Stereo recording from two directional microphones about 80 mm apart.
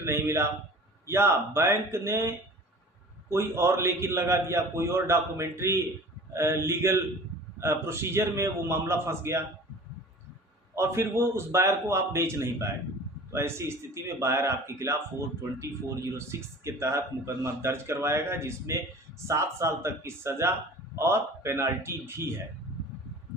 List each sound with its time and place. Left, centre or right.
0.0 s a man's voice: right
10.8 s a man's voice: right